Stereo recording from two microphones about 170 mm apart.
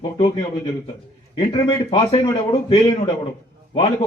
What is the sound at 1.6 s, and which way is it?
A man's voice, 30° left (ahead or behind).